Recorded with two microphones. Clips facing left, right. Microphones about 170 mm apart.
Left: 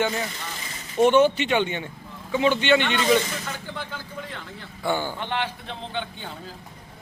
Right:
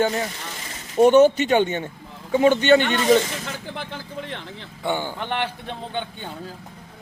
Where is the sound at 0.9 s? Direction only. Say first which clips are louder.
Right 4 dB; 40° right (ahead or behind).